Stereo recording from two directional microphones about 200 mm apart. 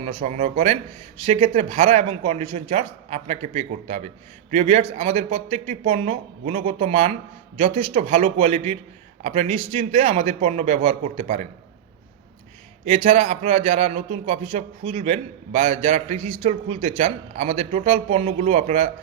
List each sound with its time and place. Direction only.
0.0 s a man's voice: 30° right (ahead or behind)
12.8 s a man's voice: 30° right (ahead or behind)